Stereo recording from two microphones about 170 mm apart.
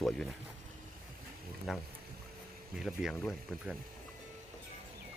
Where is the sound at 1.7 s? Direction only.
5° right (ahead or behind).